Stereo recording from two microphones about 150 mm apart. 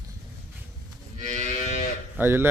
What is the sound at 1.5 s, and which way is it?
Moo, 55° left (ahead or behind).